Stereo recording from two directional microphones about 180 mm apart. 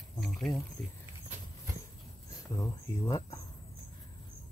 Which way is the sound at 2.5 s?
20° left (ahead or behind).